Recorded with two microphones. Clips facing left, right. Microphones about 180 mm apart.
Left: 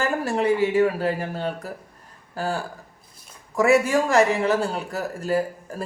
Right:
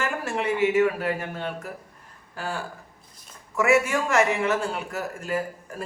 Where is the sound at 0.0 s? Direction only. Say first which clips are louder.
Left 5 dB; 35° left (ahead or behind).